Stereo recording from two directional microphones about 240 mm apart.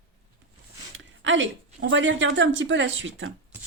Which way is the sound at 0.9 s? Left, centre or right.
Right.